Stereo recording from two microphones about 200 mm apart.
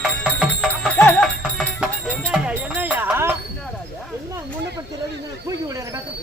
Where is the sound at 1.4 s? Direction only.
Centre (ahead or behind).